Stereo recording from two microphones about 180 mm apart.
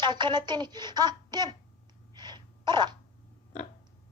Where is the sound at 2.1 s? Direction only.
25° right (ahead or behind).